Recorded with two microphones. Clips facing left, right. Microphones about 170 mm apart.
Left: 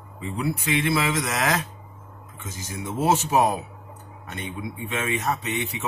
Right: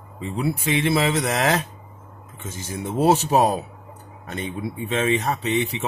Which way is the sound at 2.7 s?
35° right (ahead or behind).